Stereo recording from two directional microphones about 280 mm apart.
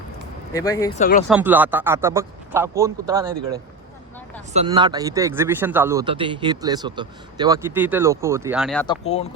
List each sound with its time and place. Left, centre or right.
0.5 s speech: centre
0.9 s speech: left
1.3 s a man's voice: centre
8.9 s speech: left